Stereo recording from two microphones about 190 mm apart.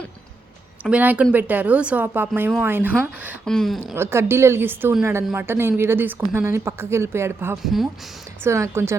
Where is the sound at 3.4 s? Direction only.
Centre (ahead or behind).